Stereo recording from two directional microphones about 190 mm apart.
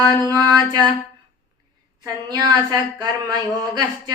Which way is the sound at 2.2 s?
20° right (ahead or behind).